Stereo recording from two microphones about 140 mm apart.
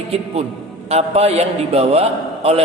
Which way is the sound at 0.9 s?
45° right (ahead or behind).